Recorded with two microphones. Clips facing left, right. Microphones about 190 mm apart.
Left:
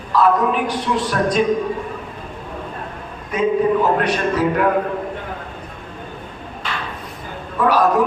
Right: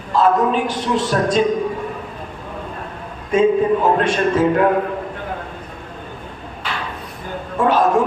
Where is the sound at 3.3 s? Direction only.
25° right (ahead or behind).